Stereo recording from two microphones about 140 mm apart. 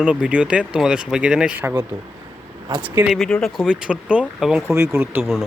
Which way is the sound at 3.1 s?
5° left (ahead or behind).